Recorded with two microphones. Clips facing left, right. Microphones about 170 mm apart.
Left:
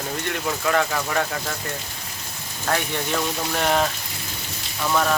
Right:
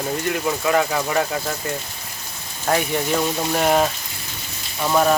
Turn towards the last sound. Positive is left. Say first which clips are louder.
# right 4 dB
turn(degrees=-20)  # may be behind; listen again after turning